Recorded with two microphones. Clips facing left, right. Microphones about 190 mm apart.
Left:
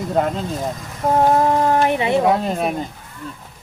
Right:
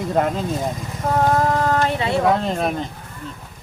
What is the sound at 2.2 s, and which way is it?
Speech, 5° left (ahead or behind).